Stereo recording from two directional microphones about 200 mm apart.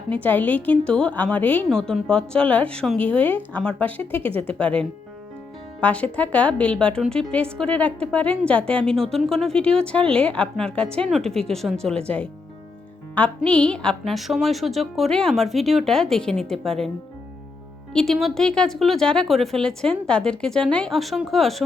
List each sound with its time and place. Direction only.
0.1 s a woman's voice: 10° left (ahead or behind)
10.8 s a woman's voice: 30° right (ahead or behind)
11.1 s a woman's voice: centre (ahead or behind)
17.9 s a woman's voice: centre (ahead or behind)